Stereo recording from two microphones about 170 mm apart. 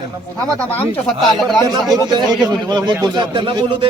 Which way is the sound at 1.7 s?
25° right (ahead or behind).